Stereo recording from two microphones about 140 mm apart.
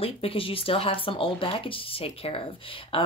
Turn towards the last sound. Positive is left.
turn(degrees=40)  # may be behind; listen again after turning